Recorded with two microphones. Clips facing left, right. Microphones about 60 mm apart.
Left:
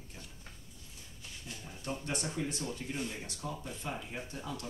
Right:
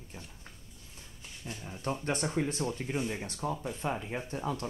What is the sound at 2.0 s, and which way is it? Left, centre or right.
Speech, right.